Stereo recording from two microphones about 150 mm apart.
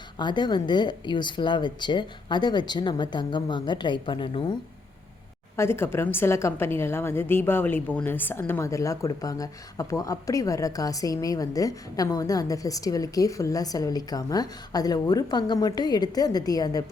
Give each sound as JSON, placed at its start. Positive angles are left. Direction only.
{"t": 0.2, "sound": "speech", "side_deg": 30}
{"t": 5.5, "sound": "a woman's voice", "side_deg": 15}